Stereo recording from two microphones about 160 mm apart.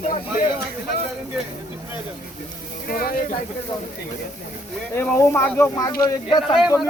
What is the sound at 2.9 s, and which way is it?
Speech, 65° left (ahead or behind).